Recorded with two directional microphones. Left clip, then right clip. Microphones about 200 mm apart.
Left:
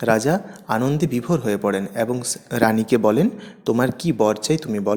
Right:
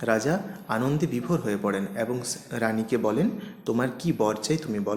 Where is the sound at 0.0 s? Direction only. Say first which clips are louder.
Left 6 dB; 35° left (ahead or behind).